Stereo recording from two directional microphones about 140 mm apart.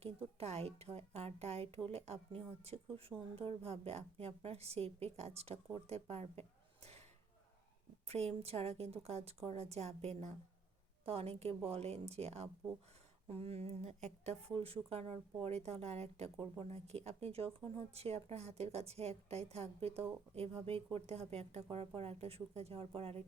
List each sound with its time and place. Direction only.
0.0 s speech: 45° right (ahead or behind)
8.0 s speech: 45° right (ahead or behind)